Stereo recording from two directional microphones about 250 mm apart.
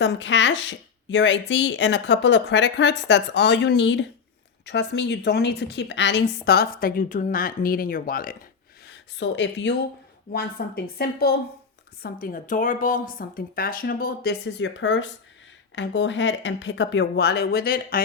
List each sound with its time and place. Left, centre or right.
0.0 s a woman's voice: left
8.9 s a woman's voice: left